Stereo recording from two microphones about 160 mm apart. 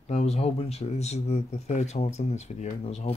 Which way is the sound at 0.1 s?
40° left (ahead or behind).